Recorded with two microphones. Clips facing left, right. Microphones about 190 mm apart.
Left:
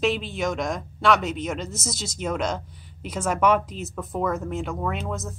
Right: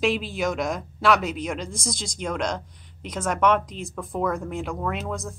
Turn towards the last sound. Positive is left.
turn(degrees=0)  # may be behind; listen again after turning